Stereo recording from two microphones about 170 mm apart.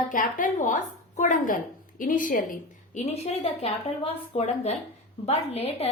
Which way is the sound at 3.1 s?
40° left (ahead or behind).